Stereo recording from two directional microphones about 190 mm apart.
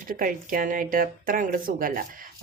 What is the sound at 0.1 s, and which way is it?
A woman's voice, 45° right (ahead or behind).